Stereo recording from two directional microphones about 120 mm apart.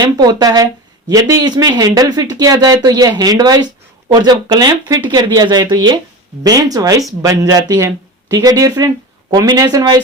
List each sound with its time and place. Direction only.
0.0 s speech: 40° right (ahead or behind)